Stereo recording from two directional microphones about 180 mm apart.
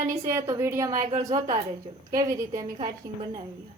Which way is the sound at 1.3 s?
35° right (ahead or behind).